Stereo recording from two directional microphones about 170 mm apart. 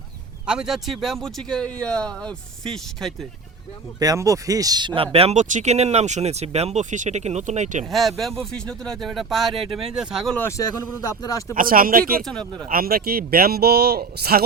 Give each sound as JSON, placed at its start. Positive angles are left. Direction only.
{"t": 0.4, "sound": "a man's voice", "side_deg": -5}
{"t": 4.0, "sound": "speech", "side_deg": -20}
{"t": 5.1, "sound": "speech", "side_deg": -40}
{"t": 7.9, "sound": "a man's voice", "side_deg": 0}
{"t": 10.3, "sound": "speech", "side_deg": 15}
{"t": 11.5, "sound": "speech", "side_deg": -55}
{"t": 12.2, "sound": "a man's voice", "side_deg": 5}
{"t": 12.6, "sound": "speech", "side_deg": -60}